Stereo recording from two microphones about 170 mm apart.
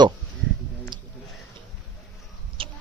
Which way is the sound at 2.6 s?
30° right (ahead or behind).